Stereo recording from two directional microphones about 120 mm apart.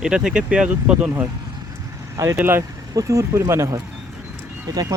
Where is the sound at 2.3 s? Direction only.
20° right (ahead or behind).